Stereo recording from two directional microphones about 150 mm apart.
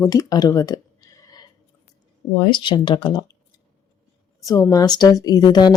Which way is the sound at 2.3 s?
30° left (ahead or behind).